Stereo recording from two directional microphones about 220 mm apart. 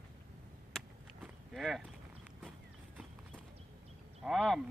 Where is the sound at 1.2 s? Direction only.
Centre (ahead or behind).